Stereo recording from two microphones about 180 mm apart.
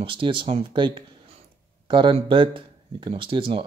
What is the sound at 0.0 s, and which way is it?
Speech, 30° right (ahead or behind).